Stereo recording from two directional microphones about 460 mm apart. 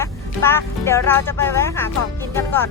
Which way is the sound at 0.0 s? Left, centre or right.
Centre.